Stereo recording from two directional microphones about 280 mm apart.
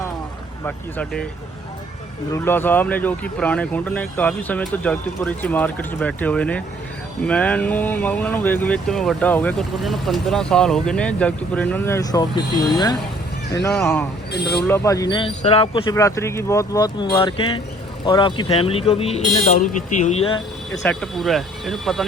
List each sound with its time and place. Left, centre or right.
0.6 s speech: centre
2.3 s speech: centre
20.8 s speech: centre